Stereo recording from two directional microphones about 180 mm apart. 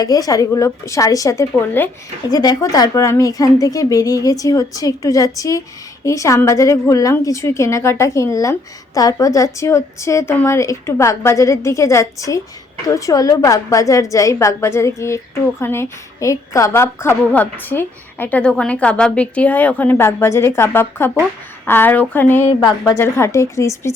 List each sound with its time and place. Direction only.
0.0 s a woman's voice: 20° left (ahead or behind)